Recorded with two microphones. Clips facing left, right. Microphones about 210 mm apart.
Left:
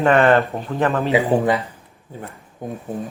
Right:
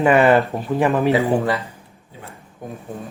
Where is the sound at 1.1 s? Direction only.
15° left (ahead or behind).